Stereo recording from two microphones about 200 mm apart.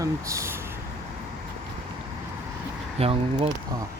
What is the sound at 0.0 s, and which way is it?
Speech, 15° right (ahead or behind).